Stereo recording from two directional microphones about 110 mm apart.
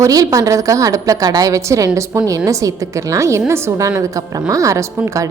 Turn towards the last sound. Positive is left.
turn(degrees=-30)  # may be behind; listen again after turning